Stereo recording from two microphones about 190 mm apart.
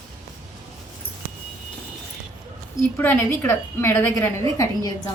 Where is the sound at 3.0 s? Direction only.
10° left (ahead or behind).